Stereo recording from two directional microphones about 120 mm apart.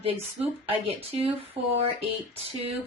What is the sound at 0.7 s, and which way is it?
Speech, 50° right (ahead or behind).